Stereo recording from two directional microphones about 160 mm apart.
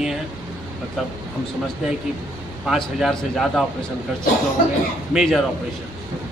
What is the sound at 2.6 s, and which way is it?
A man's voice, centre (ahead or behind).